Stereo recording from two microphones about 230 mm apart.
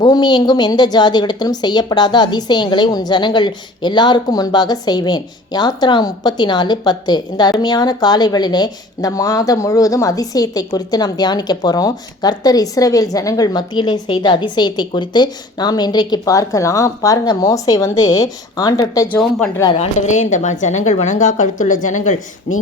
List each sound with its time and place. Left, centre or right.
0.0 s a woman's voice: centre
19.6 s a woman's voice: left